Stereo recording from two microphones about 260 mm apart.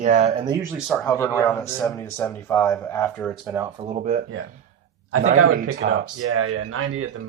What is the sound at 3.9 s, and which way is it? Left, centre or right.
Speech, right.